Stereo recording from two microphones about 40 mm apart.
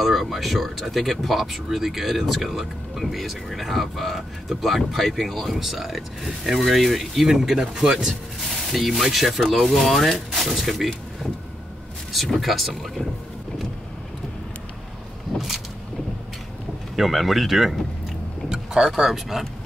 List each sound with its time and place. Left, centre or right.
0.0 s speech: centre
8.1 s speech: centre
12.1 s speech: centre
15.3 s vehicle: centre
16.9 s speech: centre
18.5 s a sound: centre
18.9 s speech: centre